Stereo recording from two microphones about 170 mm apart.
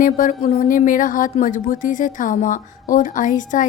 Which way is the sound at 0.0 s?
50° left (ahead or behind).